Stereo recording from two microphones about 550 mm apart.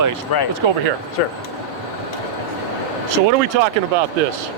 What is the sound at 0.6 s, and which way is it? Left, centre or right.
Speech, right.